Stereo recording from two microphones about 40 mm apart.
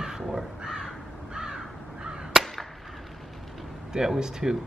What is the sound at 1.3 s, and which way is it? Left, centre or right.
Crow, centre.